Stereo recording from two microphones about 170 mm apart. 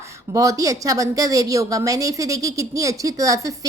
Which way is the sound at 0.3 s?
20° right (ahead or behind).